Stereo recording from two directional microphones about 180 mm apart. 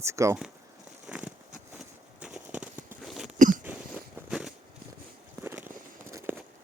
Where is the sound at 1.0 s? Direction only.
5° right (ahead or behind).